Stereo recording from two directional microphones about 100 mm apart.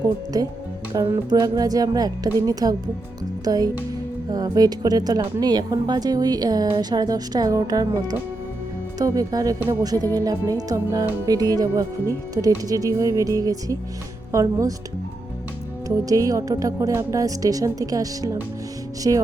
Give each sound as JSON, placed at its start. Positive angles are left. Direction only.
{"t": 0.3, "sound": "speech", "side_deg": -40}
{"t": 16.0, "sound": "speech", "side_deg": -35}
{"t": 19.1, "sound": "speech", "side_deg": -50}